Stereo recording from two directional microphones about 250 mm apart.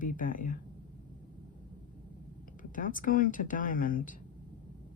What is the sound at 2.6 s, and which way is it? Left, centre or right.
Speech, left.